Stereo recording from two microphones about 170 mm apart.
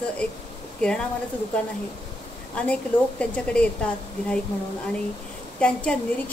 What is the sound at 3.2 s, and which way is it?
A woman's voice, 5° left (ahead or behind).